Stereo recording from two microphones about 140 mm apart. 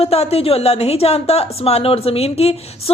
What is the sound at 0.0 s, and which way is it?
A woman's voice, 45° left (ahead or behind).